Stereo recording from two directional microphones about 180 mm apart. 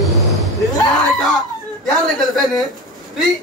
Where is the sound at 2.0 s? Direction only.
Centre (ahead or behind).